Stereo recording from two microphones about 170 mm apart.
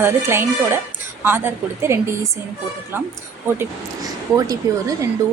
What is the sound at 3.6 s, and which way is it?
Speech, 20° right (ahead or behind).